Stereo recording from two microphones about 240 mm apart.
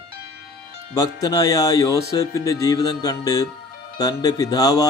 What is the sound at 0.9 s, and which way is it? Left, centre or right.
Music, centre.